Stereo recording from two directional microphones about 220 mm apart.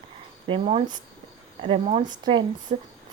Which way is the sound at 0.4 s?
25° right (ahead or behind).